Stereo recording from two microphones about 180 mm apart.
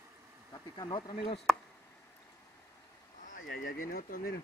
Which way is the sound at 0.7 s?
25° left (ahead or behind).